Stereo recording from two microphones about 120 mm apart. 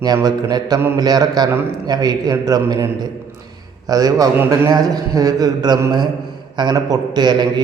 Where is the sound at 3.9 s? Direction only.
30° right (ahead or behind).